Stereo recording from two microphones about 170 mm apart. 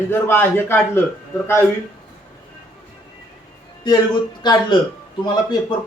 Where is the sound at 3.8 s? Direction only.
25° left (ahead or behind).